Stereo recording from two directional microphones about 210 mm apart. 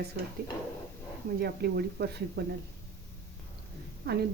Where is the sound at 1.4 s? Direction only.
50° right (ahead or behind).